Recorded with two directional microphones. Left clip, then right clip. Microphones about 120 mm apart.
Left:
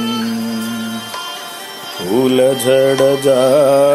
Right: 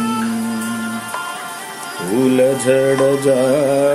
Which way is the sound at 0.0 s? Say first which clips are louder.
Even; 45° left (ahead or behind).